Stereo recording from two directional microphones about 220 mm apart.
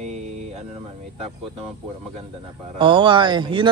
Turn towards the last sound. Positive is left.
turn(degrees=-20)  # may be behind; listen again after turning